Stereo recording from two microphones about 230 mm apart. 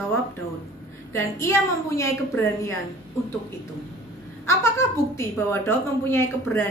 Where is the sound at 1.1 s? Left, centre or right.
Centre.